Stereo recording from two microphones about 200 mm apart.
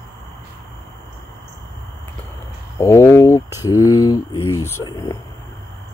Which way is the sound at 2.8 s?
15° left (ahead or behind).